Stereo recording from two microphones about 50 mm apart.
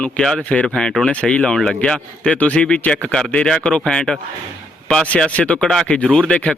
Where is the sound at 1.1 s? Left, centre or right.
Left.